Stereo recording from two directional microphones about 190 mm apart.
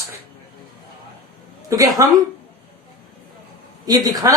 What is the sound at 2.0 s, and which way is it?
Speech, 20° right (ahead or behind).